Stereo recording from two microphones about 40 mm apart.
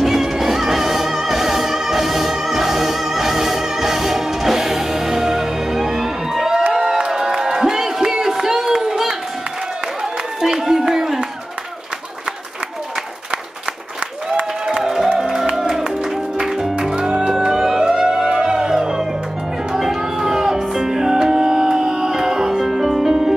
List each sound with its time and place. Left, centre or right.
0.0 s music: centre
6.7 s a sound: centre
10.4 s a sound: centre
14.7 s music: centre
16.9 s music: right
17.4 s music: centre